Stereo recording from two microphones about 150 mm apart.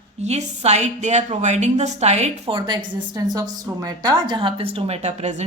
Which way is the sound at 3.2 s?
25° right (ahead or behind).